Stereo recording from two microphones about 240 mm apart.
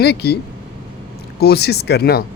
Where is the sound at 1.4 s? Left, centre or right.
Left.